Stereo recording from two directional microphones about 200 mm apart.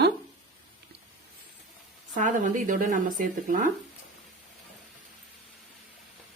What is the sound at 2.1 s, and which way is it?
Speech, 40° right (ahead or behind).